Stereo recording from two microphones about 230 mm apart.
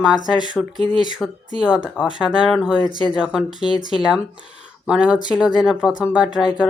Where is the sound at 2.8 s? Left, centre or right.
Left.